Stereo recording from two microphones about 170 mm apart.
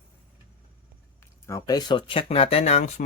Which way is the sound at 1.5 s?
20° left (ahead or behind).